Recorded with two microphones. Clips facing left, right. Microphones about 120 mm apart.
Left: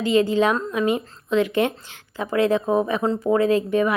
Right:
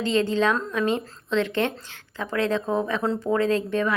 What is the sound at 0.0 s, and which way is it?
A woman's voice, 10° left (ahead or behind).